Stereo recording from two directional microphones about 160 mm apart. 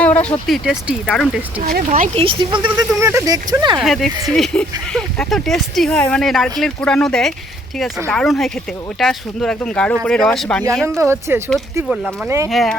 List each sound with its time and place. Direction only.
0.0 s speech: 10° left (ahead or behind)
1.6 s speech: 70° right (ahead or behind)
2.1 s speech: 35° right (ahead or behind)
2.7 s speech: 20° right (ahead or behind)
3.8 s speech: centre (ahead or behind)
10.8 s speech: 15° right (ahead or behind)
12.5 s speech: centre (ahead or behind)